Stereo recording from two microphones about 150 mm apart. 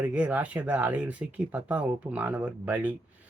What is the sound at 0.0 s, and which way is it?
Speech, 10° right (ahead or behind).